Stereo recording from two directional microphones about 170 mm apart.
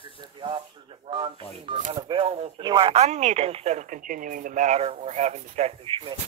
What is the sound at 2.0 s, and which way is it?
Speech, 30° right (ahead or behind).